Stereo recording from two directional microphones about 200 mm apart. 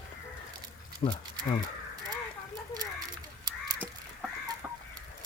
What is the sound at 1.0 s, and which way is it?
Speech, 35° left (ahead or behind).